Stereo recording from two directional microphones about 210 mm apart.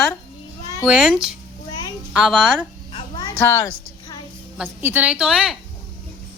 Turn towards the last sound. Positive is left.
turn(degrees=-5)  # may be behind; listen again after turning